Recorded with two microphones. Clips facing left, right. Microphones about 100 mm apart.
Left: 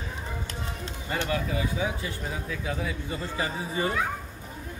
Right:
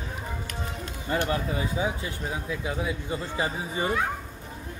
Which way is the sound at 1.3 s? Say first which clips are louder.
Right 1 dB; 25° right (ahead or behind).